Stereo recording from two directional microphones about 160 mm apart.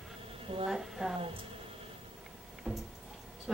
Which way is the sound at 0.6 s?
5° right (ahead or behind).